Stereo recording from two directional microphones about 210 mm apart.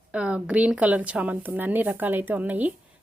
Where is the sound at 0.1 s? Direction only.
5° right (ahead or behind).